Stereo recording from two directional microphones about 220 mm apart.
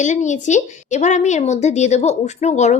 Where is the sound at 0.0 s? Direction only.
35° left (ahead or behind).